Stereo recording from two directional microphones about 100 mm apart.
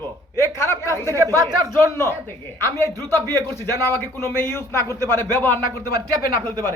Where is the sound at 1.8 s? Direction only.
25° left (ahead or behind).